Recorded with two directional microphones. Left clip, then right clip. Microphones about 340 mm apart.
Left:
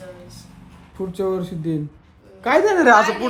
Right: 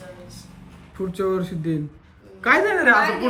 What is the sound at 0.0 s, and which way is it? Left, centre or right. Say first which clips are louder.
Speech: left 2 dB; centre.